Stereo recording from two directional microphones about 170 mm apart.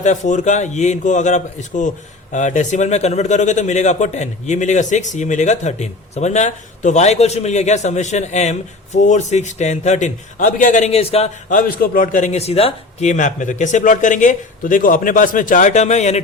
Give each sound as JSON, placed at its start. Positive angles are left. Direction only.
{"t": 0.0, "sound": "speech", "side_deg": 45}